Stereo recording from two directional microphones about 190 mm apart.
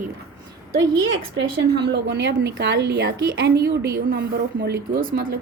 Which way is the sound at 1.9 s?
65° right (ahead or behind).